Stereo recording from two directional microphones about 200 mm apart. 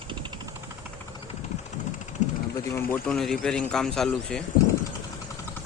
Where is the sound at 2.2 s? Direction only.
35° left (ahead or behind).